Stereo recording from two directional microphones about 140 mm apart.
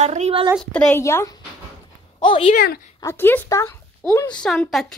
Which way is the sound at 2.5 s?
90° left.